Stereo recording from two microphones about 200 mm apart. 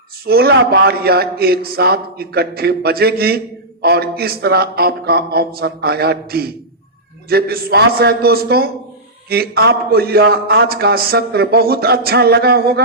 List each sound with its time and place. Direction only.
0.3 s a man's voice: 50° right (ahead or behind)